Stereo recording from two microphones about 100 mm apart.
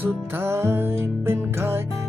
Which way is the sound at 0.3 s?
25° right (ahead or behind).